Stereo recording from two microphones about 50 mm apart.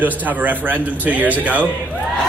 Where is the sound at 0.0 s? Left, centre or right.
Right.